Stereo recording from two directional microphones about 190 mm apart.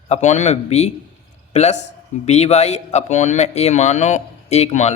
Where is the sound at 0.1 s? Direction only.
40° left (ahead or behind).